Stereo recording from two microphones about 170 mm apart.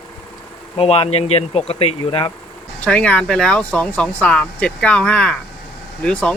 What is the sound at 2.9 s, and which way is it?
Speech, 5° left (ahead or behind).